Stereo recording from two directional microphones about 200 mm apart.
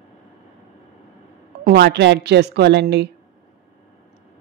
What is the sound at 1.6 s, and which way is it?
A woman's voice, 55° right (ahead or behind).